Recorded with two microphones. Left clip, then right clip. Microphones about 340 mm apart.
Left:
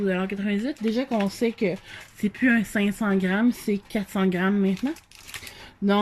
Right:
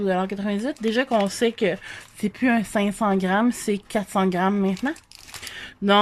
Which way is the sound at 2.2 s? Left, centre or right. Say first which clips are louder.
Even; centre.